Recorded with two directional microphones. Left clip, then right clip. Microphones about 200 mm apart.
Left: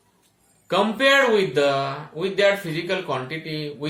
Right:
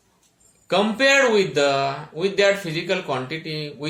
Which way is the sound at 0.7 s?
25° right (ahead or behind).